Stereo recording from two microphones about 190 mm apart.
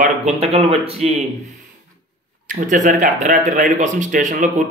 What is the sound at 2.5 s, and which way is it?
A man's voice, 45° right (ahead or behind).